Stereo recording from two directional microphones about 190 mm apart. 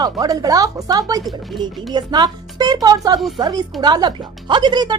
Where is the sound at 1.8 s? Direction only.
25° right (ahead or behind).